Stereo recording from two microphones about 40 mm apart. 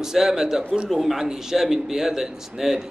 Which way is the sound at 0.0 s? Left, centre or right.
Centre.